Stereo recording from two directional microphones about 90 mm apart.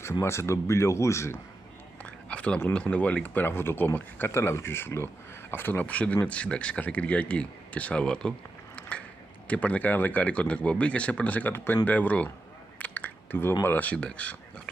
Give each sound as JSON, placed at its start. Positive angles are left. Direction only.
{"t": 0.2, "sound": "speech", "side_deg": 30}
{"t": 2.0, "sound": "a sound", "side_deg": 15}
{"t": 2.7, "sound": "speech", "side_deg": 10}